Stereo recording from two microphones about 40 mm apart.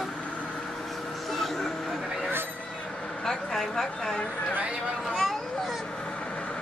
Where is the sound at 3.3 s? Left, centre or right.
Centre.